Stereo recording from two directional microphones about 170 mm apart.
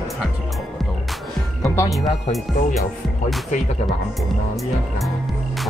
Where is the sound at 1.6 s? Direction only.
20° left (ahead or behind).